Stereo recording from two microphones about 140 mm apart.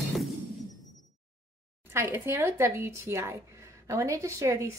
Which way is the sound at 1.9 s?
15° right (ahead or behind).